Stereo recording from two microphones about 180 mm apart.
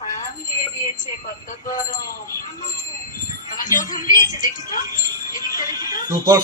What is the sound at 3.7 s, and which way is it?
A woman's voice, 50° left (ahead or behind).